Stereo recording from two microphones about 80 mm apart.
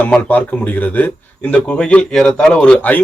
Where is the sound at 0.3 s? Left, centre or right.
Left.